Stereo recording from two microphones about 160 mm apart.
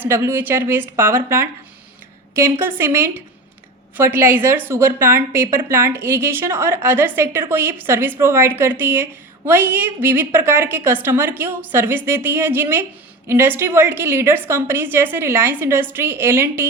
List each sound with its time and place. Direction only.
0.0 s a woman's voice: 15° right (ahead or behind)